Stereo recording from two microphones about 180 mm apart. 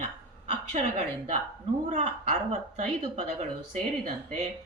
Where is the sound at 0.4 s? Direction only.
35° right (ahead or behind).